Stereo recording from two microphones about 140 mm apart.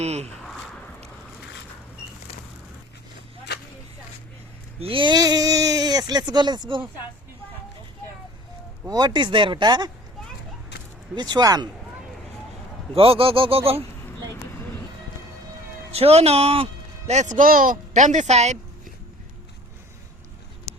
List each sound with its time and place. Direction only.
0.0 s speech: 50° right (ahead or behind)
4.8 s speech: 40° right (ahead or behind)
8.9 s speech: 30° right (ahead or behind)
11.1 s speech: 30° right (ahead or behind)
12.9 s speech: 40° right (ahead or behind)
15.9 s speech: 45° right (ahead or behind)
17.1 s speech: 60° right (ahead or behind)